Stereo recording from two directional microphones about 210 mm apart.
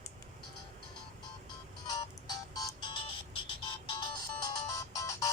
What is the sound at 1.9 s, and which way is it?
Music, 20° left (ahead or behind).